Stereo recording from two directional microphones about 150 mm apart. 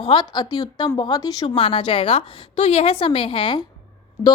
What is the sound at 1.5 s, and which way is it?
A woman's voice, 40° left (ahead or behind).